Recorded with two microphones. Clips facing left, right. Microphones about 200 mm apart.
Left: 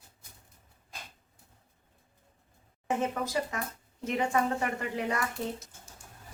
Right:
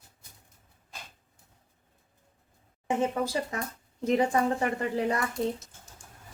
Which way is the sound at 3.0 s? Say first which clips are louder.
Right 4 dB; 30° right (ahead or behind).